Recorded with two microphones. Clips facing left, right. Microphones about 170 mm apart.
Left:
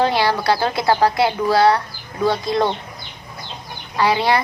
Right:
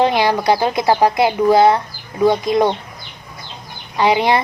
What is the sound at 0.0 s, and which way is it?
A woman's voice, 20° right (ahead or behind).